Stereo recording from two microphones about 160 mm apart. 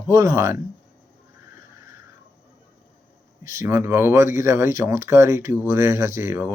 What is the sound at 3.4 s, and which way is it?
Speech, 20° right (ahead or behind).